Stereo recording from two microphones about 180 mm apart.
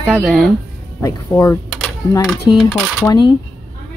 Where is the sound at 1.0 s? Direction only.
15° left (ahead or behind).